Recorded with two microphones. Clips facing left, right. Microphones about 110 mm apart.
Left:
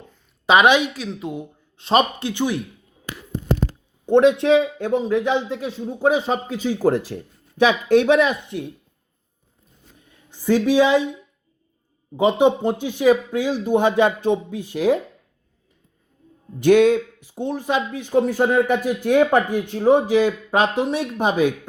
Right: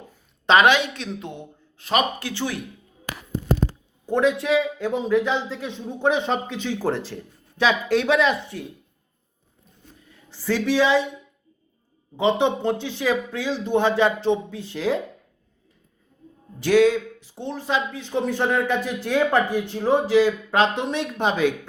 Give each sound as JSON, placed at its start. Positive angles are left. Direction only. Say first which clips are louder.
{"t": 0.4, "sound": "a woman's voice", "louder": "left 2 dB", "side_deg": 15}
{"t": 0.9, "sound": "a woman's voice", "louder": "left 4 dB", "side_deg": 5}
{"t": 1.8, "sound": "speech", "louder": "left 4 dB", "side_deg": 25}
{"t": 4.0, "sound": "speech", "louder": "left 6 dB", "side_deg": 25}
{"t": 6.1, "sound": "speech", "louder": "left 2 dB", "side_deg": 5}
{"t": 10.1, "sound": "a sound", "louder": "left 6 dB", "side_deg": 15}
{"t": 12.1, "sound": "speech", "louder": "left 4 dB", "side_deg": 15}
{"t": 16.6, "sound": "speech", "louder": "left 3 dB", "side_deg": 20}